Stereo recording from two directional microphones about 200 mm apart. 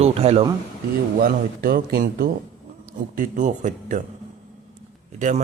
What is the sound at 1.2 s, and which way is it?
Speech, 45° right (ahead or behind).